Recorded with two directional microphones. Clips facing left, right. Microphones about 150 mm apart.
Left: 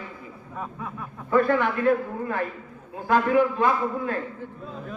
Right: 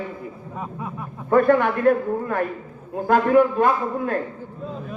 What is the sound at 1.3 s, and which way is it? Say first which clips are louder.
A man's voice: right 4 dB; 50° right (ahead or behind).